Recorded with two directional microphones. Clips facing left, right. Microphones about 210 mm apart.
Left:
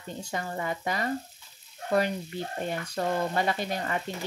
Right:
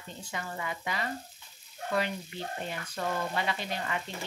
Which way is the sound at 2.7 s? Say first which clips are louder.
Left 5 dB; 40° left (ahead or behind).